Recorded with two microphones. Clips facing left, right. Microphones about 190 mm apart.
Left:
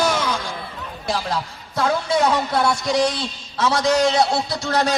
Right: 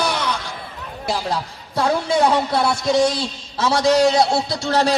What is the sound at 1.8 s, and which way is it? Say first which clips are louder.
A man's voice: right 2 dB; 30° right (ahead or behind).